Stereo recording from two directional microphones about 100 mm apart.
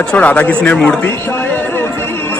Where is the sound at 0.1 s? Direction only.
15° left (ahead or behind).